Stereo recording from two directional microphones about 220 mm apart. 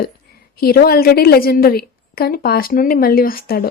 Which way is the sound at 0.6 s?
45° left (ahead or behind).